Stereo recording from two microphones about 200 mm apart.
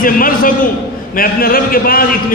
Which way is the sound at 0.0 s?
45° left (ahead or behind).